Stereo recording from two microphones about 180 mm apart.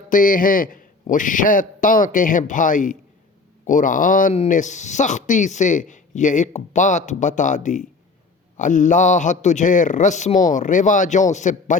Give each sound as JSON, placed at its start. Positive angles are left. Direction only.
{"t": 0.1, "sound": "speech", "side_deg": 50}